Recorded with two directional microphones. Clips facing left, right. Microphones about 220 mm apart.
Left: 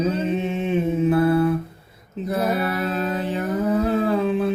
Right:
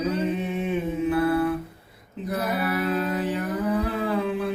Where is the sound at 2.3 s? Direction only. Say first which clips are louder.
Left 3 dB; 25° left (ahead or behind).